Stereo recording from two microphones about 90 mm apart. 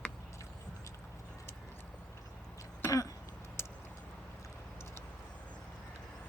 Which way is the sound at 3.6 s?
25° left (ahead or behind).